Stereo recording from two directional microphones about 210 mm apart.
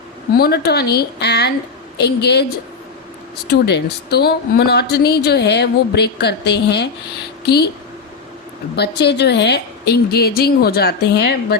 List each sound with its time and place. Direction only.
0.3 s a woman's voice: 50° left (ahead or behind)
8.7 s a woman's voice: 50° left (ahead or behind)